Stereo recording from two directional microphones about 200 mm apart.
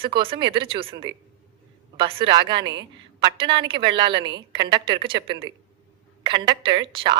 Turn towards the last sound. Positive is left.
turn(degrees=-25)  # may be behind; listen again after turning